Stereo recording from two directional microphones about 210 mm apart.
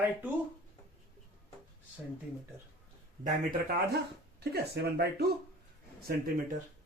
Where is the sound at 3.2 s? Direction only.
50° right (ahead or behind).